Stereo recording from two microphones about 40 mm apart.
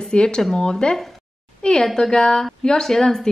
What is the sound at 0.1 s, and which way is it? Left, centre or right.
A woman's voice, left.